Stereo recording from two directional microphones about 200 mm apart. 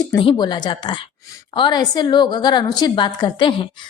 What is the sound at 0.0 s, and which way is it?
A woman's voice, 20° left (ahead or behind).